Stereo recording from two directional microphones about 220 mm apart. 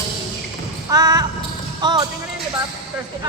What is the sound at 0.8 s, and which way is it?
Basketball bounce, 15° right (ahead or behind).